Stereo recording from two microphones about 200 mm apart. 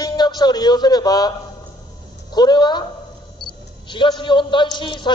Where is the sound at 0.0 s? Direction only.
20° left (ahead or behind).